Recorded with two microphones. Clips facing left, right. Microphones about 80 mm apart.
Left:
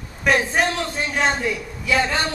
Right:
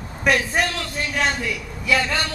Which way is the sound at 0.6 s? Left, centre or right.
Left.